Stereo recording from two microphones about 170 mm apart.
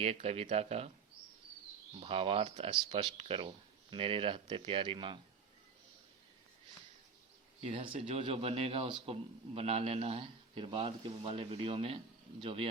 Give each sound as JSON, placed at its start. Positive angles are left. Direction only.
{"t": 0.0, "sound": "speech", "side_deg": -35}
{"t": 2.0, "sound": "speech", "side_deg": -35}
{"t": 7.6, "sound": "speech", "side_deg": -30}